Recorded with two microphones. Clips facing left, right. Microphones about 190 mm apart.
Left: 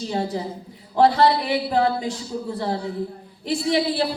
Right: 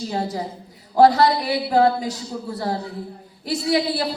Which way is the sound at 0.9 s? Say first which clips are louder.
Right 2 dB; 40° right (ahead or behind).